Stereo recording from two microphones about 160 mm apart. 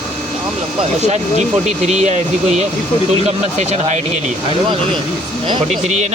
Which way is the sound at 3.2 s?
45° right (ahead or behind).